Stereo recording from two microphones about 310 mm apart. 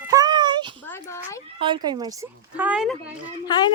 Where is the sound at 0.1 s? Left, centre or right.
Centre.